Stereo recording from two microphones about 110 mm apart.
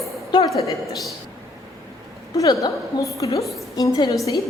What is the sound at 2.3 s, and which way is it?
A woman's voice, 30° left (ahead or behind).